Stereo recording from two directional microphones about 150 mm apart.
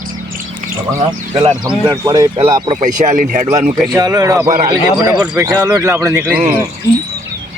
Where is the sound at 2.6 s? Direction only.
55° right (ahead or behind).